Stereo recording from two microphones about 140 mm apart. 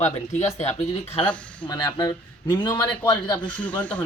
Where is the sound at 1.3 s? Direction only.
10° left (ahead or behind).